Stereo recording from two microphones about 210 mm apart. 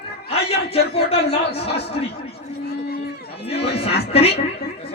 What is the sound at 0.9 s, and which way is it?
Speech, 30° left (ahead or behind).